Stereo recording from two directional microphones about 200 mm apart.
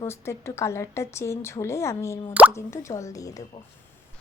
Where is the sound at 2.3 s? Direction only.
10° right (ahead or behind).